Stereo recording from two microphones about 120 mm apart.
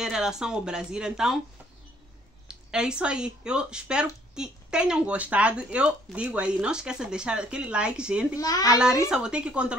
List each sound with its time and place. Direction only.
0.0 s speech: 5° right (ahead or behind)
2.4 s speech: 5° right (ahead or behind)
8.4 s a child's voice: 30° left (ahead or behind)
9.1 s speech: 5° right (ahead or behind)